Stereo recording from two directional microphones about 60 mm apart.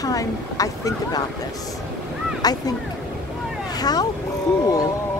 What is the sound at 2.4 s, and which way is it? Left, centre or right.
Speech, left.